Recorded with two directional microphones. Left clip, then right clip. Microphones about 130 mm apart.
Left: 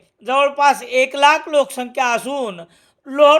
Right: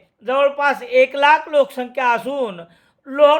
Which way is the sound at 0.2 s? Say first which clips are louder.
Left 2 dB; 30° left (ahead or behind).